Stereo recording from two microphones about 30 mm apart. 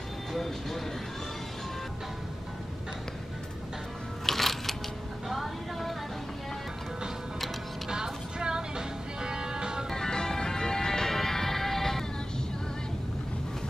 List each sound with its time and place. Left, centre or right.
0.4 s speech: centre
4.3 s music: centre
5.3 s a sound: centre
7.9 s music: right
9.8 s music: centre